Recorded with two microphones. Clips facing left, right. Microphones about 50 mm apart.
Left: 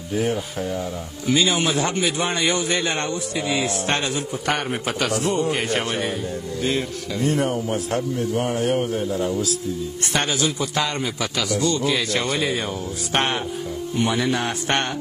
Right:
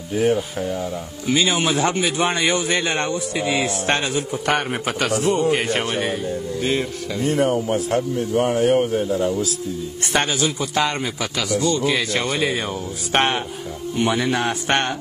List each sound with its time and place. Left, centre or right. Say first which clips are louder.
0.1 s speech: right 4 dB; centre
9.1 s a man's voice: right 2 dB; centre